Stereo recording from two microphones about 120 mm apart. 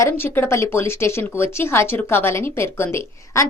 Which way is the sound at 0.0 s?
20° left (ahead or behind).